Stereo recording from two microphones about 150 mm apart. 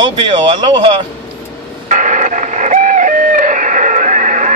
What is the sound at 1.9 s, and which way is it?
Radio, 55° right (ahead or behind).